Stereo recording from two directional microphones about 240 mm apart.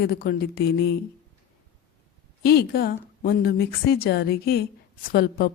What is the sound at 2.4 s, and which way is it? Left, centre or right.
A woman's voice, left.